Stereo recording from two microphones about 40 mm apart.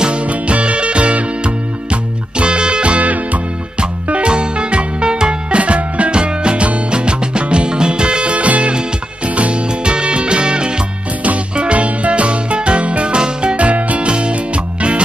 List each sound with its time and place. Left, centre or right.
0.0 s music: right
5.6 s music: right
13.6 s music: right